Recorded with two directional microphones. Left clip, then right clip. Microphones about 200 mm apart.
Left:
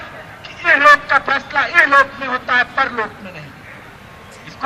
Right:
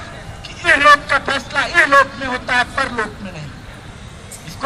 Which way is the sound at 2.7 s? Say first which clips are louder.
Left 2 dB; 20° right (ahead or behind).